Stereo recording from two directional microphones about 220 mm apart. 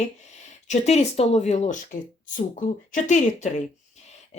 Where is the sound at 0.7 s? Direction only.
30° left (ahead or behind).